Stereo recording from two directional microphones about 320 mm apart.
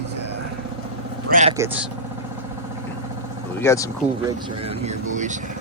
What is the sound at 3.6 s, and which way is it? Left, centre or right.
Speech, centre.